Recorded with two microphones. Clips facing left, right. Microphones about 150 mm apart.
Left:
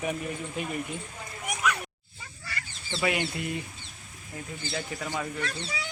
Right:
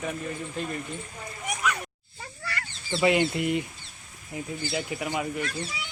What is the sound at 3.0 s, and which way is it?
Speech, 25° right (ahead or behind).